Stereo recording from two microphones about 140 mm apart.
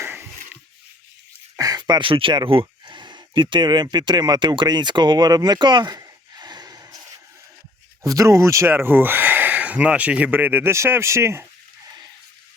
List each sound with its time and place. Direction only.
0.0 s a sound: 15° right (ahead or behind)
1.5 s speech: 25° right (ahead or behind)
8.0 s speech: 25° right (ahead or behind)